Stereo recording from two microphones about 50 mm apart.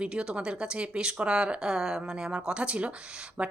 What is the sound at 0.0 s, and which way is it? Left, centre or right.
A woman's voice, centre.